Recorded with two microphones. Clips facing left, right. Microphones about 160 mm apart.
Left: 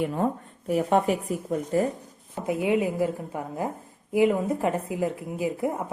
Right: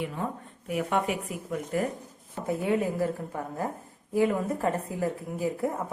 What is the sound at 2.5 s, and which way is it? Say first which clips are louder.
A woman's voice: left 3 dB; 15° left (ahead or behind).